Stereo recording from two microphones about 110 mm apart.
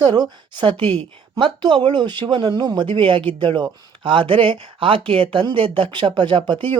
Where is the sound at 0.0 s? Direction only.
45° right (ahead or behind).